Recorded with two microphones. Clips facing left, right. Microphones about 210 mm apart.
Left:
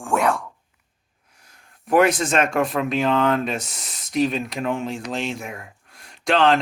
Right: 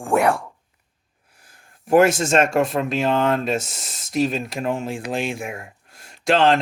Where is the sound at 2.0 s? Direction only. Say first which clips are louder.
Right 2 dB; 45° right (ahead or behind).